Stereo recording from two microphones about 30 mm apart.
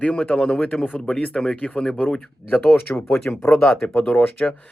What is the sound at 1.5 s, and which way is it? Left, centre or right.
Speech, left.